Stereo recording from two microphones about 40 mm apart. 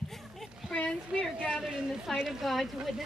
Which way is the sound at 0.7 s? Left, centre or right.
Left.